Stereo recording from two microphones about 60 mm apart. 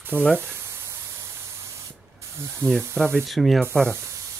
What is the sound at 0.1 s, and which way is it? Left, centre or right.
Speech, right.